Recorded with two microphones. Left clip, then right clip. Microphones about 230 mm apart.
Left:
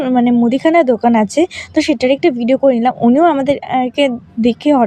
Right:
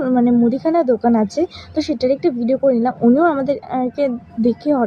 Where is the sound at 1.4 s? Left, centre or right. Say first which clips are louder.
Left 6 dB; left.